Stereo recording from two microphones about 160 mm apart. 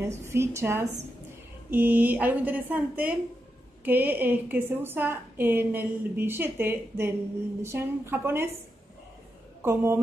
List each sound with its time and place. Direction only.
0.3 s a woman's voice: 15° right (ahead or behind)
9.6 s speech: 15° right (ahead or behind)